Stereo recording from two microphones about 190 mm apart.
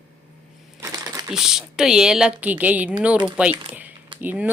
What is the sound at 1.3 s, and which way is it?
A woman's voice, 5° right (ahead or behind).